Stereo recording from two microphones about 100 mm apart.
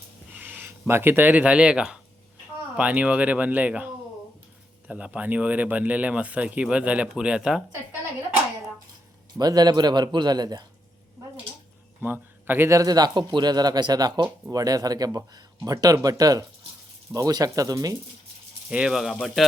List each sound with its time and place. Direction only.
0.3 s speech: 20° right (ahead or behind)
9.4 s a man's voice: 40° right (ahead or behind)
12.0 s a man's voice: 20° right (ahead or behind); by 17.9 s 35° right (ahead or behind)
18.7 s speech: 10° right (ahead or behind)